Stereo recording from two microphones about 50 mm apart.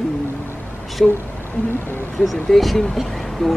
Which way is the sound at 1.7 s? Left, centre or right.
Left.